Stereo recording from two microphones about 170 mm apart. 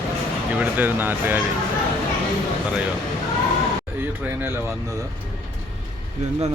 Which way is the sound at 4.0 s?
10° right (ahead or behind).